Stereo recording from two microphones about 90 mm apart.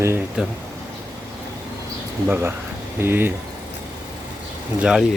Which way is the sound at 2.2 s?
25° right (ahead or behind).